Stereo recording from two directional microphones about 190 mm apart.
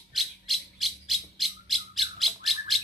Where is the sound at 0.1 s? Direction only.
Centre (ahead or behind).